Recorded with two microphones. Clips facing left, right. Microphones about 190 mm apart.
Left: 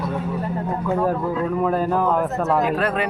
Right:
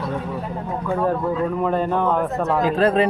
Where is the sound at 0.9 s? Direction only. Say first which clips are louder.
Right 1 dB; 5° left (ahead or behind).